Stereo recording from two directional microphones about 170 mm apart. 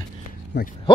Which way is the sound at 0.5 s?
75° left (ahead or behind).